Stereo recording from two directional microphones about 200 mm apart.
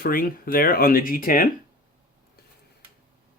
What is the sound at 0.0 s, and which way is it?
Speech, 45° left (ahead or behind).